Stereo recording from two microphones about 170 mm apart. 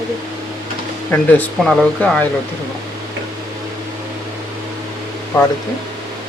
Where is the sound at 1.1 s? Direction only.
5° left (ahead or behind).